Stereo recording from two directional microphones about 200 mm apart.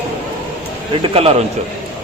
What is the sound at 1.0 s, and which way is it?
Speech, 30° right (ahead or behind).